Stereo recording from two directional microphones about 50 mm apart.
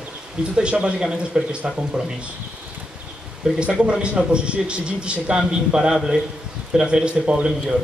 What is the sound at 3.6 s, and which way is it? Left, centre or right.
Speech, centre.